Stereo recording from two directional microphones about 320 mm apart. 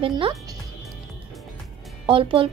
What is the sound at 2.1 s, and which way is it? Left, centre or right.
Speech, centre.